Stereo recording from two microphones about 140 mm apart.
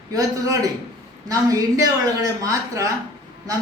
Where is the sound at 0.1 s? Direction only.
25° right (ahead or behind).